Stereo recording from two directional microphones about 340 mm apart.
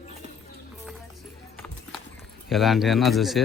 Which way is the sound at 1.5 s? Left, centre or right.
Centre.